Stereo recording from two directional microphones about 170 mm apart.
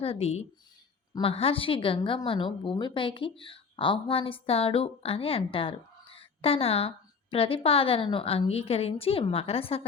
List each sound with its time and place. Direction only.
0.0 s speech: 35° left (ahead or behind)